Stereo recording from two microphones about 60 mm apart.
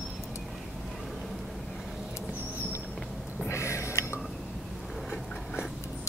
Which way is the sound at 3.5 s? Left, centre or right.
Left.